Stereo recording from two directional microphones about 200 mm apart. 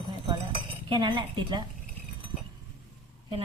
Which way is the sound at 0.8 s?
25° right (ahead or behind).